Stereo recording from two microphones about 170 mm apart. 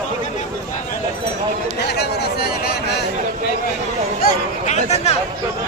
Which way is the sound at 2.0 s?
65° left (ahead or behind).